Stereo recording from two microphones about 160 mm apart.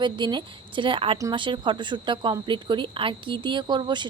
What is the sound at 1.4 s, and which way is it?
Speech, 30° right (ahead or behind).